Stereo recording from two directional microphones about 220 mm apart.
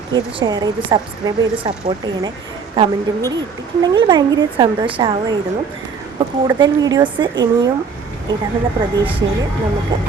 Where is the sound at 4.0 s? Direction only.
20° right (ahead or behind).